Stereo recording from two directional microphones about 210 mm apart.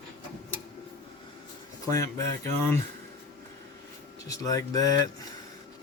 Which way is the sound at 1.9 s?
15° left (ahead or behind).